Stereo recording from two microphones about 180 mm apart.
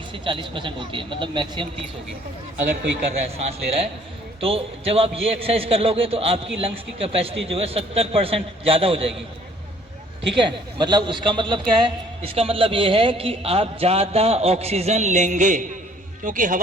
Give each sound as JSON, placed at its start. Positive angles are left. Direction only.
{"t": 0.1, "sound": "speech", "side_deg": -30}
{"t": 3.1, "sound": "a man's voice", "side_deg": -35}
{"t": 10.4, "sound": "a man's voice", "side_deg": -25}